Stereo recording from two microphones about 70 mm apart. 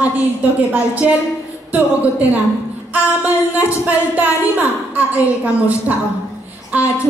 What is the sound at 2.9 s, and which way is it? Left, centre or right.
A woman's voice, right.